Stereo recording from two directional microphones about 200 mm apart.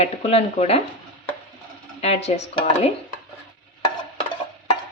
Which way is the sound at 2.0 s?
35° left (ahead or behind).